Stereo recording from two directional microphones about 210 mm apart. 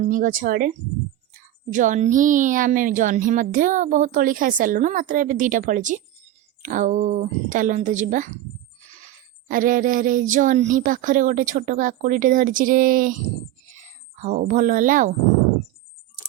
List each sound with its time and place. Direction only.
0.0 s a woman's voice: 40° right (ahead or behind)
9.5 s a woman's voice: 40° right (ahead or behind)
13.7 s a sound: 35° right (ahead or behind)